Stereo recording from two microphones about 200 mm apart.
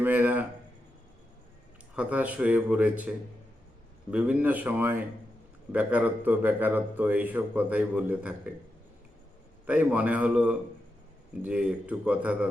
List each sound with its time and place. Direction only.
0.0 s a man's voice: 10° right (ahead or behind)
2.0 s a man's voice: 5° right (ahead or behind)
9.6 s a man's voice: 10° right (ahead or behind)